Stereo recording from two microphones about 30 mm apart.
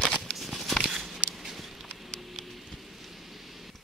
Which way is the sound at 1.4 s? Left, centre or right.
Centre.